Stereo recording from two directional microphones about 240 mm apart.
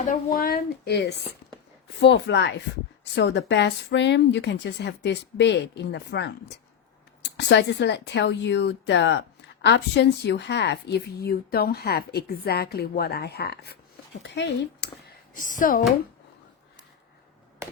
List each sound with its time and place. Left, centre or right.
0.1 s a woman's voice: left
15.4 s a woman's voice: left